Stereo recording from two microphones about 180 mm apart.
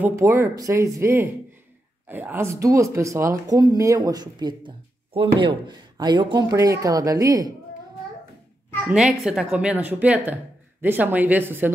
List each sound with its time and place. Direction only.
0.0 s a woman's voice: 15° right (ahead or behind)
8.8 s a woman's voice: 5° right (ahead or behind)